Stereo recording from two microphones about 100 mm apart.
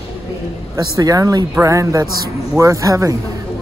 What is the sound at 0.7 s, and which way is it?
Speech, 40° right (ahead or behind).